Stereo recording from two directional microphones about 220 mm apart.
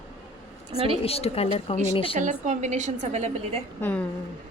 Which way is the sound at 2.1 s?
35° right (ahead or behind).